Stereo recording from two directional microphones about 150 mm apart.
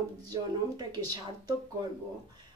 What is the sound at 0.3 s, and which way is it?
Speech, 25° right (ahead or behind).